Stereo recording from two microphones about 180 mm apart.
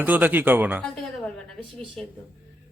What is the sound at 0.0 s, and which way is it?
Speech, 10° right (ahead or behind).